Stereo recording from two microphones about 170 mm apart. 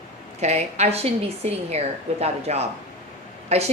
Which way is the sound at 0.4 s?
40° right (ahead or behind).